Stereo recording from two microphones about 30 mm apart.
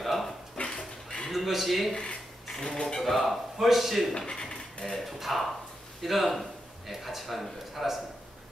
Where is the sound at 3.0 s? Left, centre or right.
Centre.